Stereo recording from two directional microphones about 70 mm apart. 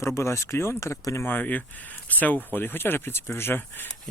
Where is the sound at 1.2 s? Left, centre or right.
Left.